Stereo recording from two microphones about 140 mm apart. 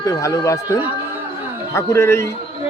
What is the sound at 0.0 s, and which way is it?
Speech, 20° left (ahead or behind).